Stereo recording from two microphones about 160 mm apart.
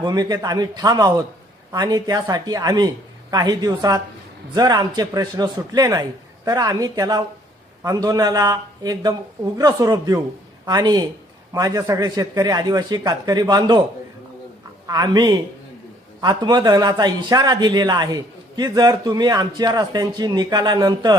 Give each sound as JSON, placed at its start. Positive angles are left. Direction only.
{"t": 0.0, "sound": "a man's voice", "side_deg": -25}
{"t": 14.8, "sound": "a man's voice", "side_deg": -25}